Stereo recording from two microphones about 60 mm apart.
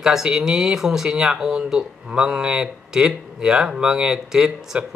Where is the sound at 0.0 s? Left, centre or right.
Centre.